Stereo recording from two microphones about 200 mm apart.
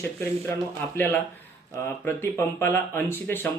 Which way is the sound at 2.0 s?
10° left (ahead or behind).